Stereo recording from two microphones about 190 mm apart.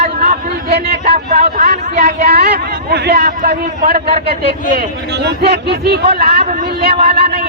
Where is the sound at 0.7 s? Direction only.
55° right (ahead or behind).